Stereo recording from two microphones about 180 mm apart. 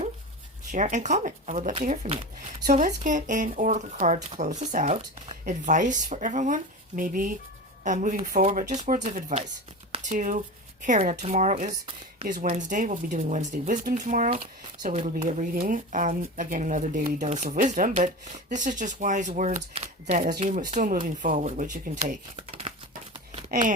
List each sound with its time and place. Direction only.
0.7 s speech: 45° right (ahead or behind)
22.4 s crumpling: 30° right (ahead or behind)
23.1 s a sound: 40° right (ahead or behind)